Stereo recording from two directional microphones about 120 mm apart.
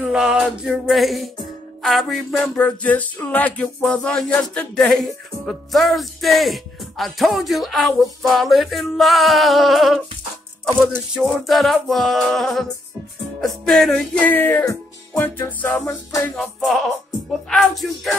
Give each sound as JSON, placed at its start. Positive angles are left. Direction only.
{"t": 0.0, "sound": "music", "side_deg": -5}
{"t": 2.3, "sound": "music", "side_deg": 10}
{"t": 11.1, "sound": "music", "side_deg": 0}
{"t": 16.3, "sound": "music", "side_deg": 0}